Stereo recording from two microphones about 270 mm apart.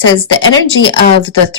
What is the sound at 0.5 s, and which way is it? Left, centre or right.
Speech, left.